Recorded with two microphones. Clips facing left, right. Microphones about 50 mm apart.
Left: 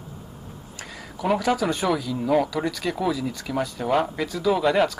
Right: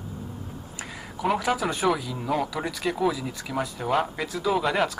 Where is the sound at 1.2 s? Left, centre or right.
Centre.